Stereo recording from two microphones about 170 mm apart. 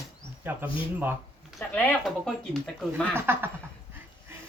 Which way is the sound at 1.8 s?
5° left (ahead or behind).